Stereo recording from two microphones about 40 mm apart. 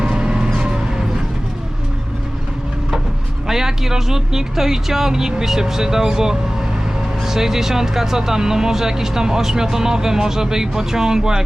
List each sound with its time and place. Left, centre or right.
0.0 s vehicle: centre
3.4 s speech: centre